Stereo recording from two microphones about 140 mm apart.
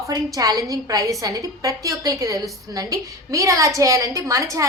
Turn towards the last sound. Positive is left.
turn(degrees=-25)  # may be behind; listen again after turning